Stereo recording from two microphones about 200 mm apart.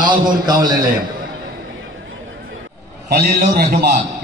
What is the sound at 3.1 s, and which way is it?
Speech, 45° right (ahead or behind).